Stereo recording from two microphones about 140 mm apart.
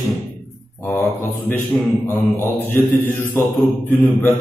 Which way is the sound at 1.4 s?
15° left (ahead or behind).